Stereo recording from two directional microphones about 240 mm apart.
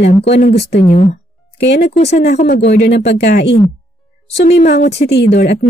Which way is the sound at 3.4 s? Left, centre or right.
Left.